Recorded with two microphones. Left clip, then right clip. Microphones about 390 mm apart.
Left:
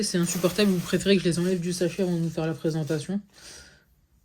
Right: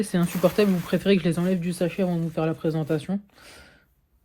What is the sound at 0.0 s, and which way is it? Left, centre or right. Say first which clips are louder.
Speech: right 3 dB; centre.